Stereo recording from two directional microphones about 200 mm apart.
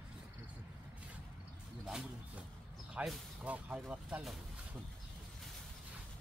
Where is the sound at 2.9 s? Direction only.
5° right (ahead or behind).